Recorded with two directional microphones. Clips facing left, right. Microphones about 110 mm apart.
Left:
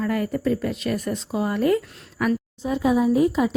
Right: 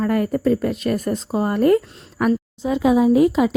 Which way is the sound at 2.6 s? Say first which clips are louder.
Right 4 dB; 90° right.